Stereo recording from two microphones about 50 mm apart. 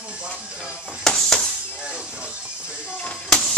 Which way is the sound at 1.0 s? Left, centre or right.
Centre.